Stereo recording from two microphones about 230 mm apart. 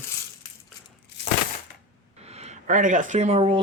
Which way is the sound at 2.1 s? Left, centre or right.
Right.